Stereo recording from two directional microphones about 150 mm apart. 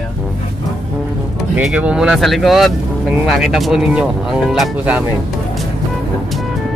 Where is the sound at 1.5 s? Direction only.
10° right (ahead or behind).